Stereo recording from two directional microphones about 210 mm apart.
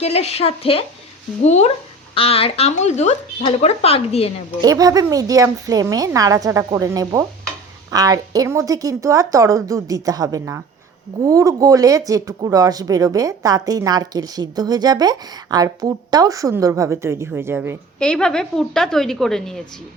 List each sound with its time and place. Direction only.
0.0 s speech: 30° left (ahead or behind)
4.6 s speech: 15° right (ahead or behind)
18.0 s a woman's voice: 5° left (ahead or behind)